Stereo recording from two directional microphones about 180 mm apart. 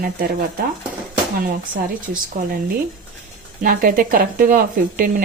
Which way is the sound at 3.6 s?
55° right (ahead or behind).